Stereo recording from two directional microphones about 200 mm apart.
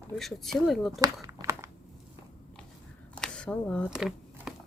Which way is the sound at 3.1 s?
5° left (ahead or behind).